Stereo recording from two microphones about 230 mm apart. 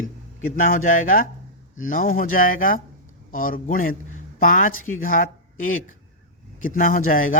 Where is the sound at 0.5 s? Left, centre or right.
Left.